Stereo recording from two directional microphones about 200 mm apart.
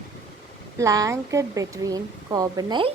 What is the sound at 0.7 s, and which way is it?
Speech, 15° right (ahead or behind).